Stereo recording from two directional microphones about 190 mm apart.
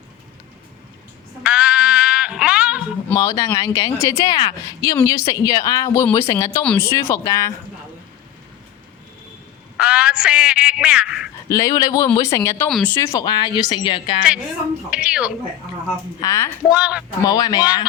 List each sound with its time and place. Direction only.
1.5 s music: 5° right (ahead or behind)
3.1 s speech: 20° left (ahead or behind)
9.7 s a man's voice: 5° right (ahead or behind)
11.4 s a woman's voice: 15° left (ahead or behind)
14.8 s a man's voice: 5° right (ahead or behind)
16.2 s speech: 15° left (ahead or behind)
16.7 s a man's voice: 5° right (ahead or behind)
17.2 s a woman's voice: 20° left (ahead or behind)